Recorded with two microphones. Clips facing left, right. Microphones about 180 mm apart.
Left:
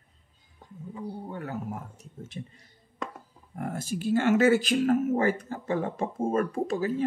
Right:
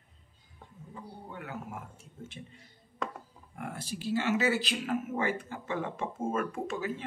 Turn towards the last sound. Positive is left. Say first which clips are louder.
# left 7 dB
turn(degrees=35)  # may be behind; listen again after turning